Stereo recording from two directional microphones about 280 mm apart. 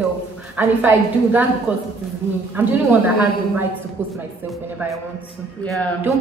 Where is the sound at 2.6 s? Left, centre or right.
Centre.